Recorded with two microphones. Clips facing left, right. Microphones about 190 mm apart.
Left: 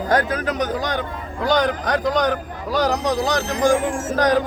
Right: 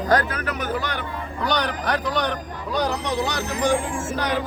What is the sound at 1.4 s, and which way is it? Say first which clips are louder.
A man's voice: left 6 dB; 45° left (ahead or behind).